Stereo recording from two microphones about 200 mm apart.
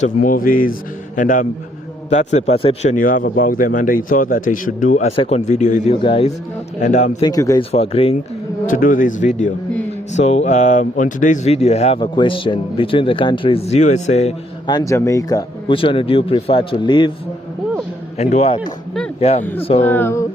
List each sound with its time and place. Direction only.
0.0 s a man's voice: 40° left (ahead or behind)
7.2 s speech: 20° left (ahead or behind)
7.7 s speech: 30° left (ahead or behind)
8.6 s speech: 40° left (ahead or behind)
14.7 s speech: 20° left (ahead or behind)
18.2 s speech: 35° left (ahead or behind)
19.8 s speech: 10° left (ahead or behind)